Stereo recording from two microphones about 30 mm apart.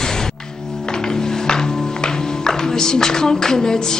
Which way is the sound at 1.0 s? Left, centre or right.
Left.